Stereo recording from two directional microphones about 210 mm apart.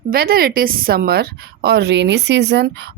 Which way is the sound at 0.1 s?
45° right (ahead or behind).